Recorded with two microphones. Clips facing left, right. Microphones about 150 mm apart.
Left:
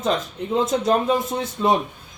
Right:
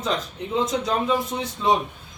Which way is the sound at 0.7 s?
50° left (ahead or behind).